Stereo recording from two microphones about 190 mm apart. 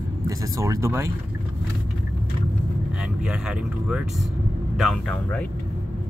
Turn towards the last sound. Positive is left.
turn(degrees=0)  # may be behind; listen again after turning